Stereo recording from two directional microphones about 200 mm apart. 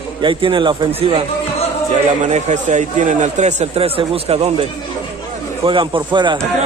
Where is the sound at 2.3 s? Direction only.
35° right (ahead or behind).